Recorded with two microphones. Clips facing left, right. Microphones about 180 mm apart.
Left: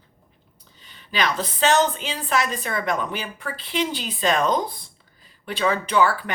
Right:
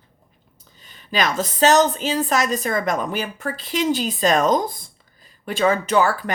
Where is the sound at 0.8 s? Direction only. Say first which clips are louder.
Right 3 dB; 45° right (ahead or behind).